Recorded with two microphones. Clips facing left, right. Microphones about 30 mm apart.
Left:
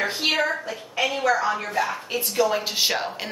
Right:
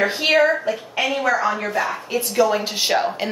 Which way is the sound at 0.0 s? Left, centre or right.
Right.